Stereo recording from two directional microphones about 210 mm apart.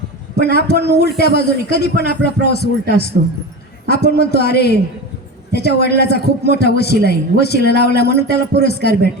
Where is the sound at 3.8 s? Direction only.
50° left (ahead or behind).